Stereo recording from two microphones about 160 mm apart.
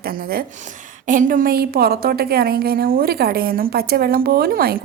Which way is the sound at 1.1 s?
55° right (ahead or behind).